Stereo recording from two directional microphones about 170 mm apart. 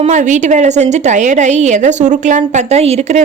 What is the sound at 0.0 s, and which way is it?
A woman's voice, 45° right (ahead or behind).